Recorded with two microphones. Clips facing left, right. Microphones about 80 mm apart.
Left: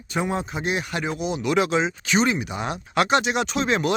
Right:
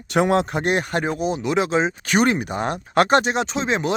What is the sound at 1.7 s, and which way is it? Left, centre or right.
Speech, right.